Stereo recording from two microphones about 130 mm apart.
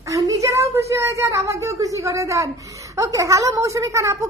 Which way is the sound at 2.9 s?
25° right (ahead or behind).